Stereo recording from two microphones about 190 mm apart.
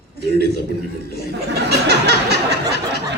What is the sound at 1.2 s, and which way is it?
A woman's voice, 60° right (ahead or behind).